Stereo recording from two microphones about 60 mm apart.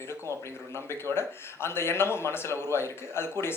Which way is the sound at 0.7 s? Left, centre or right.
Left.